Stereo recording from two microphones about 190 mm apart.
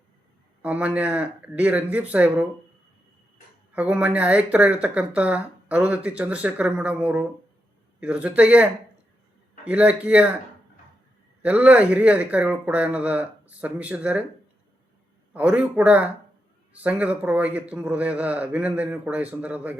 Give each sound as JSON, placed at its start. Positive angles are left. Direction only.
{"t": 0.6, "sound": "speech", "side_deg": -5}
{"t": 3.7, "sound": "speech", "side_deg": -5}
{"t": 11.4, "sound": "speech", "side_deg": -5}
{"t": 15.3, "sound": "speech", "side_deg": -5}